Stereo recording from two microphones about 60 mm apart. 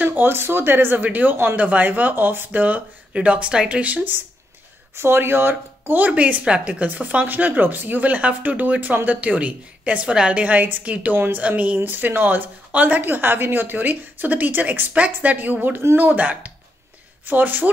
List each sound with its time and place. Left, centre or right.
0.0 s speech: right
1.6 s speech: right
4.9 s speech: right
11.1 s speech: right
11.4 s speech: right